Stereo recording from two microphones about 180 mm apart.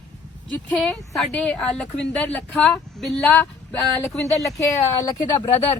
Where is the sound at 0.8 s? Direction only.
Centre (ahead or behind).